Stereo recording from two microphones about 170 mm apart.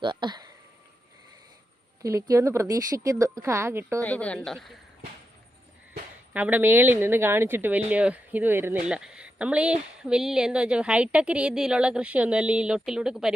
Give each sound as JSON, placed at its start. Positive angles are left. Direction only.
{"t": 0.0, "sound": "speech", "side_deg": -25}
{"t": 2.0, "sound": "speech", "side_deg": -20}
{"t": 4.0, "sound": "speech", "side_deg": 10}
{"t": 6.3, "sound": "speech", "side_deg": -10}